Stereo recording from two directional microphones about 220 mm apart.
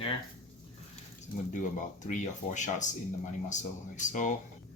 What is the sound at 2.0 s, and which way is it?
Speech, 35° left (ahead or behind).